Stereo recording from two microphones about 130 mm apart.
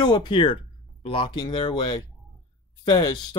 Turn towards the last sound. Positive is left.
turn(degrees=30)  # may be behind; listen again after turning